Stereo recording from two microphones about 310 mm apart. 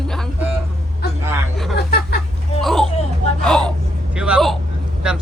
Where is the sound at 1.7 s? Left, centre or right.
Left.